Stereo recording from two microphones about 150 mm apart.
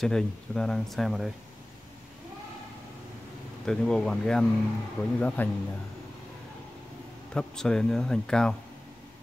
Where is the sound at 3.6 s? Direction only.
5° left (ahead or behind).